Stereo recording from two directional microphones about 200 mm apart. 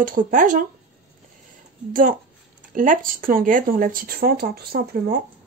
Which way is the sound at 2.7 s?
40° right (ahead or behind).